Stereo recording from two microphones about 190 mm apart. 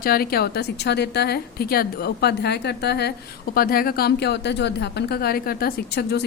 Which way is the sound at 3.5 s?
50° left (ahead or behind).